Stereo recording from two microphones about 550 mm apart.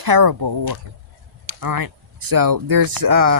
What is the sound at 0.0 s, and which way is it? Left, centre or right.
Speech, right.